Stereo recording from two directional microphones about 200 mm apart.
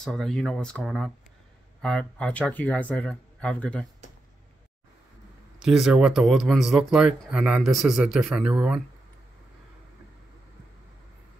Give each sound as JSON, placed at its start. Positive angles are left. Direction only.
{"t": 0.0, "sound": "speech", "side_deg": 0}
{"t": 5.6, "sound": "speech", "side_deg": 0}